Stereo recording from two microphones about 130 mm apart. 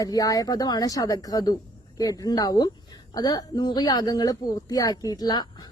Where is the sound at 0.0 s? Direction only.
25° left (ahead or behind).